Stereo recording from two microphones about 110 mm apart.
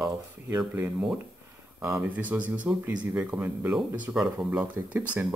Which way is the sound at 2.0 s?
10° right (ahead or behind).